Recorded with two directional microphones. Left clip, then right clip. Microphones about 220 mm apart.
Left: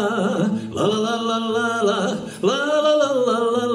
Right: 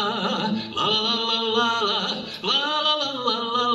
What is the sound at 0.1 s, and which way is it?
Music, 55° left (ahead or behind).